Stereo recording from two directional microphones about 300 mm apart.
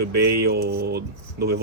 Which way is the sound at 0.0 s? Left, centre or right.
Right.